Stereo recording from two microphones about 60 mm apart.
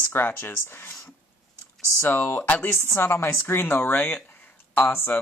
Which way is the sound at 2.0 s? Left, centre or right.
Left.